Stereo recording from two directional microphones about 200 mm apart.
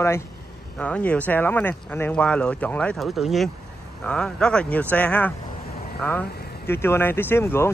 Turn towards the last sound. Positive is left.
turn(degrees=10)  # may be behind; listen again after turning